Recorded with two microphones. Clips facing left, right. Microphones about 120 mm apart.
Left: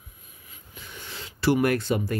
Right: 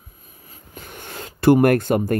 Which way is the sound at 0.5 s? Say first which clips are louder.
Right 6 dB; 50° right (ahead or behind).